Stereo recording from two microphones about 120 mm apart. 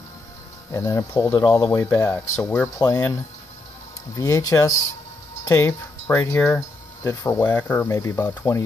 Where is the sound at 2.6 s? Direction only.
25° left (ahead or behind).